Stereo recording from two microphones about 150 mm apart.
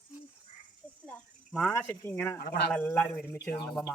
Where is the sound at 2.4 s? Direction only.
90° left.